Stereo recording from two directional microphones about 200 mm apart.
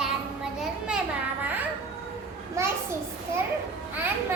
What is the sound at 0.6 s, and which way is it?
Children playing, 5° right (ahead or behind).